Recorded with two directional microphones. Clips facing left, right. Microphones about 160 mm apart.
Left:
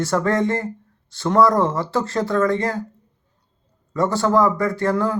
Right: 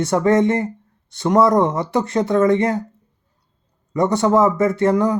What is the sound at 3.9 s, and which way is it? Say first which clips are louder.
Speech: right 2 dB; 20° right (ahead or behind).